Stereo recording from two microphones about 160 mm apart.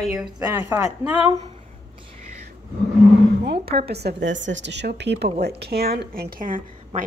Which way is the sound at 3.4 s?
90° right.